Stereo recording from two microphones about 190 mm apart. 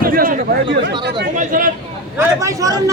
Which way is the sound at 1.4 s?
45° right (ahead or behind).